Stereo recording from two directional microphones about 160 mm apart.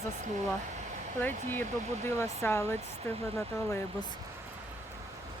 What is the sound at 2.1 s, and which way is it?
Speech, 15° left (ahead or behind).